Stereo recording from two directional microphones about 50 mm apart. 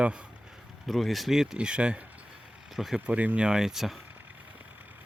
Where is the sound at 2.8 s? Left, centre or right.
Centre.